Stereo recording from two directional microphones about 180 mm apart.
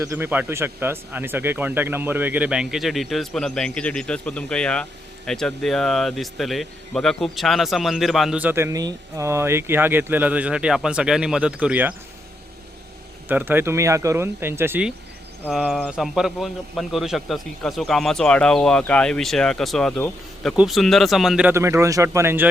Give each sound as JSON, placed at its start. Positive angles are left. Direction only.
{"t": 0.0, "sound": "speech", "side_deg": -15}
{"t": 13.2, "sound": "speech", "side_deg": -10}
{"t": 21.5, "sound": "speech", "side_deg": -15}